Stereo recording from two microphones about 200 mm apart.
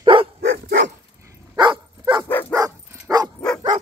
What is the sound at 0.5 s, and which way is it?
Dog, 60° right (ahead or behind).